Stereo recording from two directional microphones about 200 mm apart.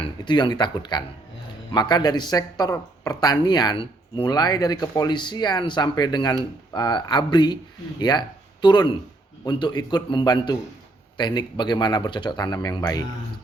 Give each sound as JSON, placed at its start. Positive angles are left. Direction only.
{"t": 0.0, "sound": "speech", "side_deg": 25}